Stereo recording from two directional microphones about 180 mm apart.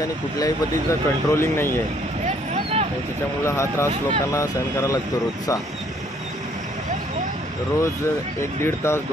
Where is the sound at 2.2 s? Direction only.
35° right (ahead or behind).